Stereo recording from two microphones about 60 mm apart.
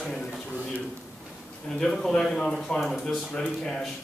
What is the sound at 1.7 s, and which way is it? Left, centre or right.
A man's voice, centre.